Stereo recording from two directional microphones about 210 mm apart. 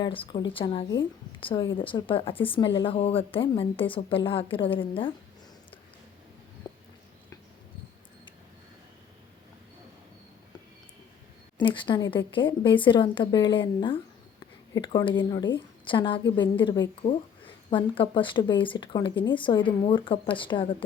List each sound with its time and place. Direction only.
0.0 s speech: 25° left (ahead or behind)
11.6 s a woman's voice: 25° left (ahead or behind)